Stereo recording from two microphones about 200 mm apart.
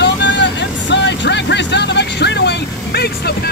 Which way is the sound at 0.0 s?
60° left (ahead or behind).